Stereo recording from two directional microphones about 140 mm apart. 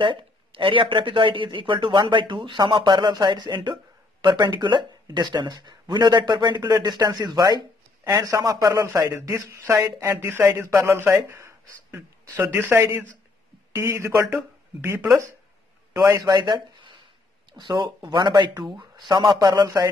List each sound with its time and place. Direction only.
0.0 s speech: 35° right (ahead or behind); by 15.2 s 15° right (ahead or behind)
16.0 s speech: 25° right (ahead or behind)